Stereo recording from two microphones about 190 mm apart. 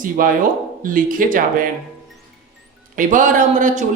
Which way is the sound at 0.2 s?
45° right (ahead or behind).